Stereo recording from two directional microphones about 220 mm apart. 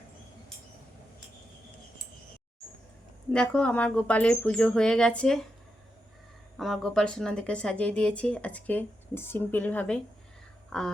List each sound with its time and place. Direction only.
3.3 s speech: 5° left (ahead or behind)
6.6 s speech: centre (ahead or behind)
10.7 s a sound: 5° left (ahead or behind)